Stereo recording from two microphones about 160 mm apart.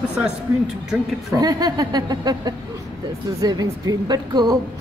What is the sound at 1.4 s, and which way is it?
A woman's voice, 25° right (ahead or behind).